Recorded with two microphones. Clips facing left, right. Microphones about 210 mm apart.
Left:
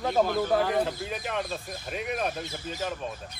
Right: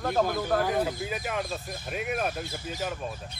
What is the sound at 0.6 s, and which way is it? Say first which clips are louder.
Speech: left 1 dB; 5° right (ahead or behind).